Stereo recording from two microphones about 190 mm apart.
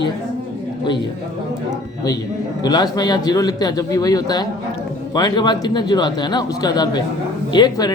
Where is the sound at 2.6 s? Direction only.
20° left (ahead or behind).